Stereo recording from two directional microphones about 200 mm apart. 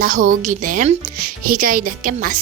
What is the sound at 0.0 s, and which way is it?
A woman's voice, 40° right (ahead or behind).